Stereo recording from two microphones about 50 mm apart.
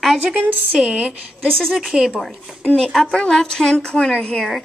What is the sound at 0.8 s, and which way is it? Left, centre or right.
Speech, centre.